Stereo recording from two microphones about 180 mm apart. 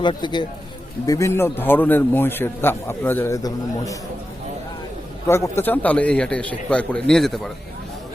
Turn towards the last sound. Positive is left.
turn(degrees=0)  # may be behind; listen again after turning